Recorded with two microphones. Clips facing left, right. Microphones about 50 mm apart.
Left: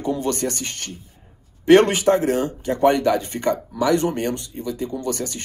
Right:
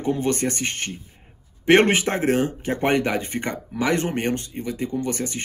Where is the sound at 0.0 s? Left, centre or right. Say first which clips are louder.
Even; right.